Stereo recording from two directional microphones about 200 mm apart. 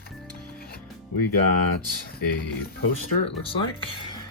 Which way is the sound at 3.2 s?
25° left (ahead or behind).